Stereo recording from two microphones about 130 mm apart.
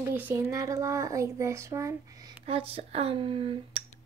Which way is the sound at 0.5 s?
25° right (ahead or behind).